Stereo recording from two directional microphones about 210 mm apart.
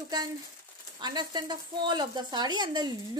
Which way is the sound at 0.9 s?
20° right (ahead or behind).